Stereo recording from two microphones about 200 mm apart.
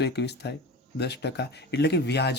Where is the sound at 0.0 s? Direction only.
55° left (ahead or behind).